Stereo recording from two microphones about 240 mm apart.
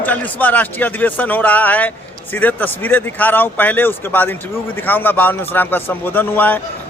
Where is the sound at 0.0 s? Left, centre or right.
Centre.